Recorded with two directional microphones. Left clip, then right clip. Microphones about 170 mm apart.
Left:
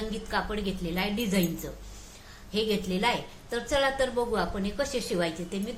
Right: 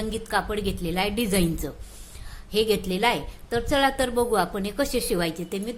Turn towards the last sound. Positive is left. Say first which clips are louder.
# right 3 dB
turn(degrees=-70)  # may be behind; listen again after turning